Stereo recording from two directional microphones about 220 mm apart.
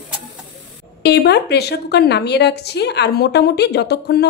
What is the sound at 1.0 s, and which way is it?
A woman's voice, 50° left (ahead or behind).